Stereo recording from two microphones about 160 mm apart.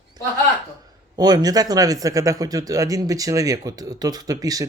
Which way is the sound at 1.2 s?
25° right (ahead or behind).